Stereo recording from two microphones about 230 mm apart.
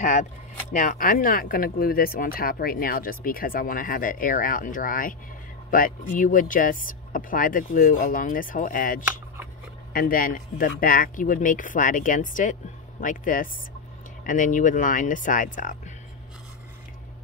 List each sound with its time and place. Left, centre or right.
0.0 s speech: left